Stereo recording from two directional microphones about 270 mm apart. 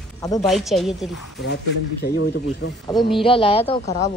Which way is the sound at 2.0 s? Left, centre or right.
Left.